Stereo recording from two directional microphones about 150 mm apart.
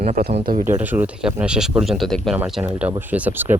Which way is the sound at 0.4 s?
65° right (ahead or behind).